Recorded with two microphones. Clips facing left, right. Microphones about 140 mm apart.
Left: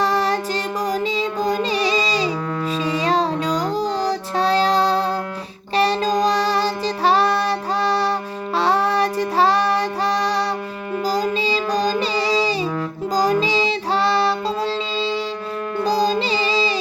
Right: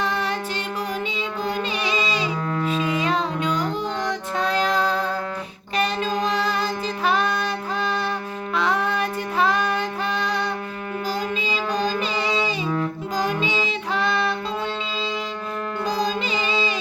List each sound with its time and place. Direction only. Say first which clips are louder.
0.0 s music: left 6 dB; 35° left (ahead or behind)
5.7 s child singing: left 5 dB; 35° left (ahead or behind)
8.5 s music: left 5 dB; 35° left (ahead or behind)
13.1 s child singing: left 6 dB; 35° left (ahead or behind)
15.8 s music: left 6 dB; 35° left (ahead or behind)